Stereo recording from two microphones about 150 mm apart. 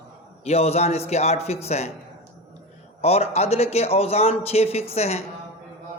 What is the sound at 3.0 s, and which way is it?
A man's voice, 45° left (ahead or behind).